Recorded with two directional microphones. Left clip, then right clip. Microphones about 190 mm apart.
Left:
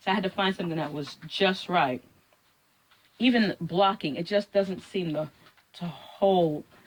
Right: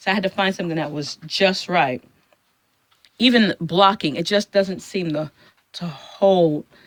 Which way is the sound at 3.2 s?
55° right (ahead or behind).